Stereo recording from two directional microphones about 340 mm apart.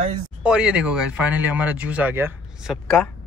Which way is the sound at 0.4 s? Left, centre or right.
Centre.